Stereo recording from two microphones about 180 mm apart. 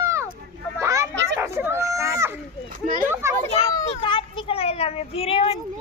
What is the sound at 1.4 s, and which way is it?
Dog, 15° right (ahead or behind).